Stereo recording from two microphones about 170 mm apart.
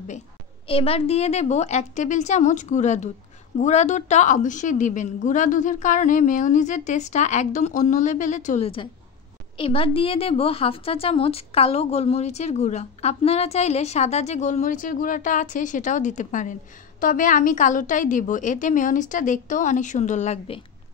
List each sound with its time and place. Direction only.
0.7 s a woman's voice: 35° left (ahead or behind)